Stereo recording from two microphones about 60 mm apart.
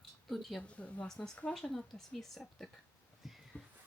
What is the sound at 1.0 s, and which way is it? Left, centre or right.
A woman's voice, centre.